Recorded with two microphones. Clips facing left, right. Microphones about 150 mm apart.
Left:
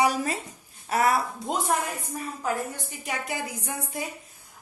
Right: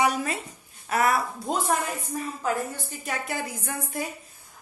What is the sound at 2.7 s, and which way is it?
A woman's voice, 15° left (ahead or behind).